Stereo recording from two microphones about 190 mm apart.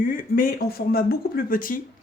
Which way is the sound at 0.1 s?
45° left (ahead or behind).